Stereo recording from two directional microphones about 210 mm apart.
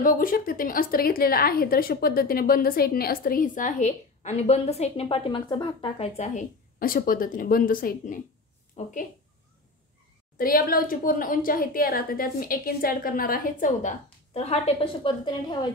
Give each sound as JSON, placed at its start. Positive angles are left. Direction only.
{"t": 0.0, "sound": "a woman's voice", "side_deg": 40}
{"t": 8.8, "sound": "a woman's voice", "side_deg": 30}
{"t": 10.3, "sound": "a woman's voice", "side_deg": 45}